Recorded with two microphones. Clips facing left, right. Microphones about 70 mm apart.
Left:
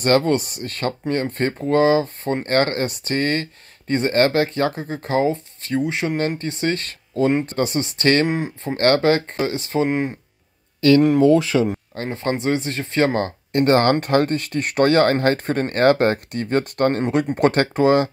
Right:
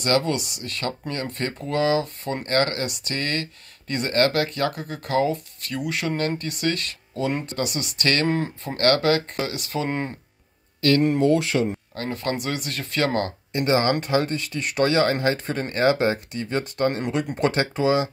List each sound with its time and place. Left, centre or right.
0.0 s speech: left
8.3 s speech: centre
9.8 s speech: centre
11.9 s speech: left
13.5 s speech: left